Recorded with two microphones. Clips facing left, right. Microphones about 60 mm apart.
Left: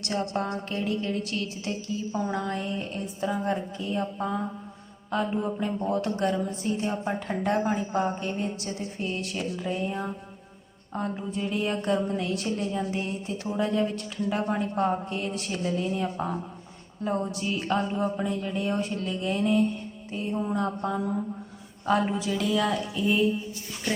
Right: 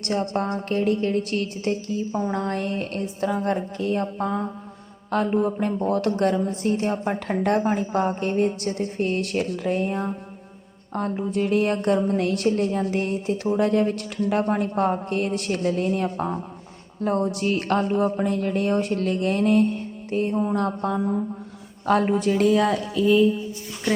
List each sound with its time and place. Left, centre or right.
0.0 s a woman's voice: right
6.5 s a woman's voice: right